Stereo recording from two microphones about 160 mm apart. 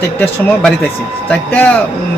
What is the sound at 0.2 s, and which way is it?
A man's voice, 10° left (ahead or behind).